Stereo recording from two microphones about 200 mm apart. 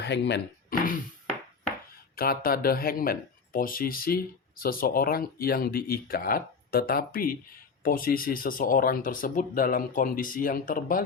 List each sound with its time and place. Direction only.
0.0 s speech: 60° left (ahead or behind)
2.1 s speech: 45° left (ahead or behind)